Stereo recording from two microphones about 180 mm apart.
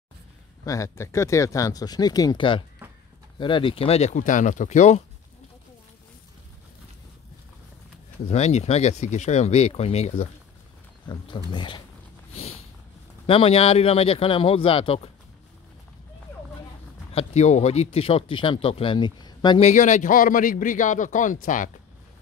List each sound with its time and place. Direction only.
0.7 s speech: 15° left (ahead or behind)
2.8 s a sound: 10° right (ahead or behind)
3.3 s speech: 30° left (ahead or behind)
8.3 s speech: 40° left (ahead or behind)
12.4 s a sound: 35° left (ahead or behind)
13.3 s speech: 30° left (ahead or behind)
17.1 s speech: 35° left (ahead or behind)
19.6 s a man's voice: 45° left (ahead or behind)